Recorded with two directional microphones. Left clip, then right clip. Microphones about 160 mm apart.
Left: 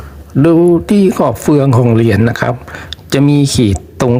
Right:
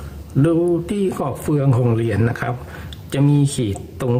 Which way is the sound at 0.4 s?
35° left (ahead or behind).